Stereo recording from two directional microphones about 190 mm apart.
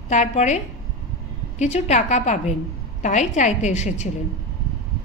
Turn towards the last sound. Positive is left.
turn(degrees=35)  # may be behind; listen again after turning